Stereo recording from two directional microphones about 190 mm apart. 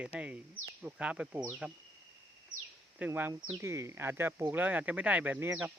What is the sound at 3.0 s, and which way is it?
Speech, 10° right (ahead or behind).